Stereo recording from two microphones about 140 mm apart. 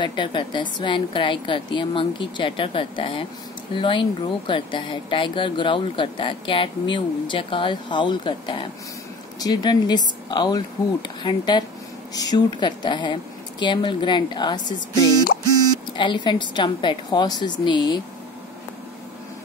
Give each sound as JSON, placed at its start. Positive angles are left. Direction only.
{"t": 0.0, "sound": "speech", "side_deg": 35}